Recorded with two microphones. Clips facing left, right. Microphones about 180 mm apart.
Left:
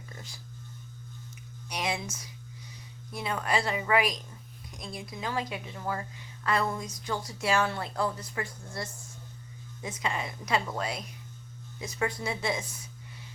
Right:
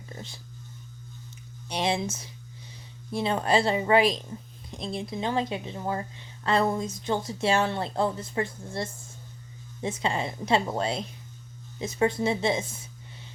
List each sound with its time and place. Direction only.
0.1 s hum: 25° right (ahead or behind)
1.6 s a woman's voice: 30° right (ahead or behind)